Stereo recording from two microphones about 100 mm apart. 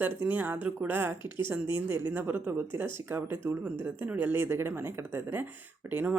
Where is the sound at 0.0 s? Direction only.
20° right (ahead or behind).